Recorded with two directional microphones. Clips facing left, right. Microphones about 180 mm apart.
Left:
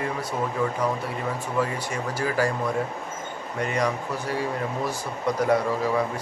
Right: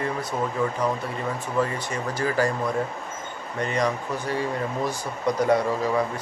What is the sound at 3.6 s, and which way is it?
Speech, 10° left (ahead or behind).